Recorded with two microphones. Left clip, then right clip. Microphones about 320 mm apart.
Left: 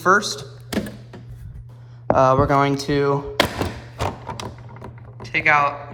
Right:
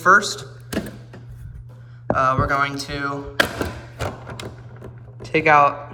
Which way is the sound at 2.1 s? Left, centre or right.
Centre.